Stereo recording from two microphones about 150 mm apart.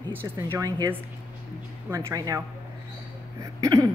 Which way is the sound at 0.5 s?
25° right (ahead or behind).